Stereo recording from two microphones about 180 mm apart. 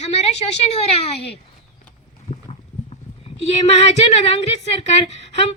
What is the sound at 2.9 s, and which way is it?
A woman's voice, 35° left (ahead or behind).